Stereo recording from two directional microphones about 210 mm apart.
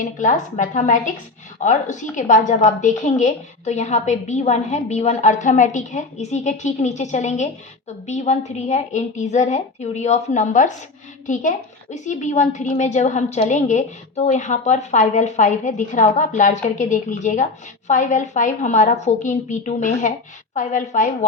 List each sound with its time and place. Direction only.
0.0 s a woman's voice: 35° left (ahead or behind)